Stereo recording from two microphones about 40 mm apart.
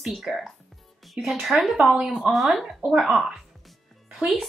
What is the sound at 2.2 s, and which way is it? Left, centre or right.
Speech, centre.